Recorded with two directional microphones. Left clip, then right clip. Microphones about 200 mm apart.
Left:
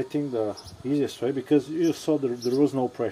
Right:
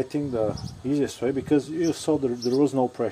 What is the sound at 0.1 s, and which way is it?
Speech, 25° right (ahead or behind).